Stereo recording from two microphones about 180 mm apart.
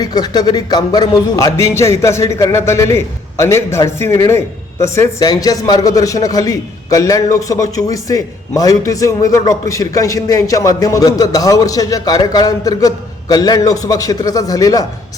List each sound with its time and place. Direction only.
0.0 s speech: 20° left (ahead or behind)